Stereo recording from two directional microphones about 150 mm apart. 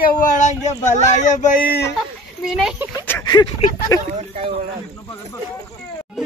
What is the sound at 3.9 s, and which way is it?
Speech, 20° left (ahead or behind).